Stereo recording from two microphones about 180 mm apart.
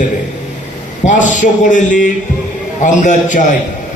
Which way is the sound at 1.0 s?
45° left (ahead or behind).